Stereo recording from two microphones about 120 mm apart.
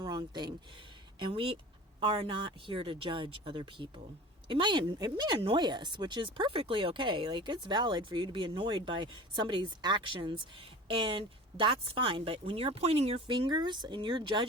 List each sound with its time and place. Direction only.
0.0 s speech: 35° right (ahead or behind)
1.2 s speech: 45° right (ahead or behind)